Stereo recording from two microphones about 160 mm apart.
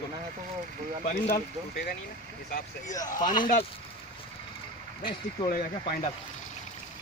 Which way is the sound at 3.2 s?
55° left (ahead or behind).